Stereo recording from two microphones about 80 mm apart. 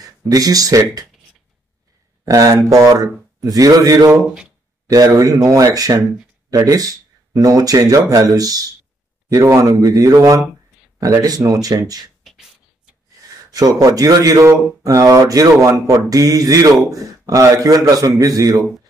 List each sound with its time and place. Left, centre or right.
0.0 s speech: right
2.2 s speech: right
12.2 s beatboxing: centre
13.5 s speech: right